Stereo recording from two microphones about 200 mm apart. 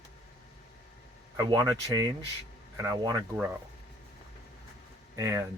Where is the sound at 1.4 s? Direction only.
20° right (ahead or behind).